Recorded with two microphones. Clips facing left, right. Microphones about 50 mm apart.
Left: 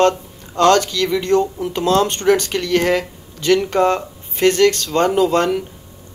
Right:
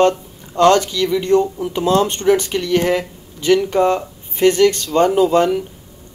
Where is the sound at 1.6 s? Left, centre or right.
Right.